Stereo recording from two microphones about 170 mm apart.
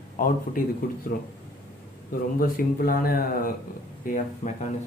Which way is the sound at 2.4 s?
55° left (ahead or behind).